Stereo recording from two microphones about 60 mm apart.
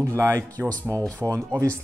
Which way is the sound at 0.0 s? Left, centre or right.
Right.